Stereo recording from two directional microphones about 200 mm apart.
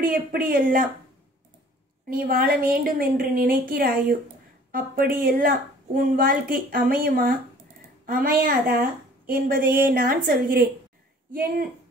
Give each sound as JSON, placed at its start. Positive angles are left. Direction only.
{"t": 0.0, "sound": "a woman's voice", "side_deg": -45}
{"t": 2.0, "sound": "a woman's voice", "side_deg": -50}